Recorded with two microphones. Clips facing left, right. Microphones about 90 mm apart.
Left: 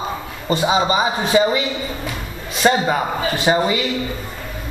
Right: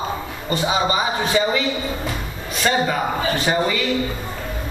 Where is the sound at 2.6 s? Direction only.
20° left (ahead or behind).